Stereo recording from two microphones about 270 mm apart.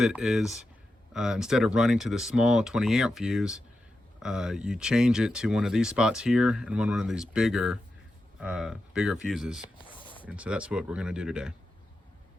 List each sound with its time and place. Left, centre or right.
0.0 s speech: centre
9.6 s a sound: centre
10.2 s speech: centre